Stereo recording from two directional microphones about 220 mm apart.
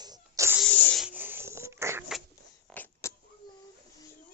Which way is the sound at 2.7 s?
10° left (ahead or behind).